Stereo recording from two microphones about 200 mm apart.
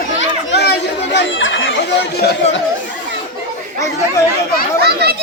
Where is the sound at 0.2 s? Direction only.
60° left (ahead or behind).